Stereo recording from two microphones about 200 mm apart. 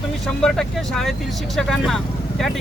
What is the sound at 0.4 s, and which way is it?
Speech, centre (ahead or behind).